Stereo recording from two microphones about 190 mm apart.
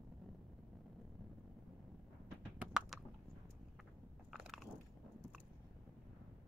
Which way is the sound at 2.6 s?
5° right (ahead or behind).